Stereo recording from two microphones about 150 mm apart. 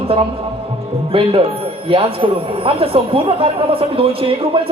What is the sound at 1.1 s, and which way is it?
Speech, 40° right (ahead or behind).